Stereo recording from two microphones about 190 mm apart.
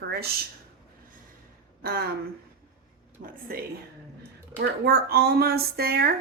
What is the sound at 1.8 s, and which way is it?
Speech, 55° right (ahead or behind).